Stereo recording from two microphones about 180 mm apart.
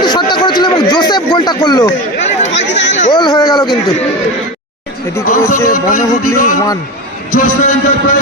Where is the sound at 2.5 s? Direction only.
80° left.